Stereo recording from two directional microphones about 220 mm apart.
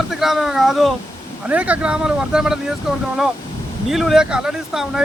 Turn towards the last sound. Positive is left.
turn(degrees=-5)  # may be behind; listen again after turning